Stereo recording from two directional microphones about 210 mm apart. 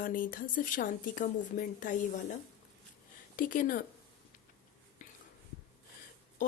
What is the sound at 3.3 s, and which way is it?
Speech, 40° left (ahead or behind).